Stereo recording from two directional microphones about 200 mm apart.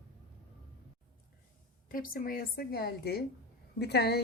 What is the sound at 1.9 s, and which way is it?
Speech, 45° left (ahead or behind).